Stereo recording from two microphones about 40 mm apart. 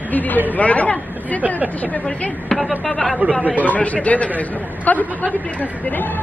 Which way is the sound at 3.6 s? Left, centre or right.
Left.